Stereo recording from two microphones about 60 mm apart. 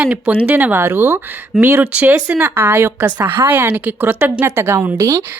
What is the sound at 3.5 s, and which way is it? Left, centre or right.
Speech, right.